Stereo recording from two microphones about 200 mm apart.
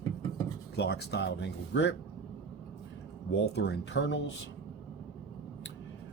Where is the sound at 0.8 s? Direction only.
55° left (ahead or behind).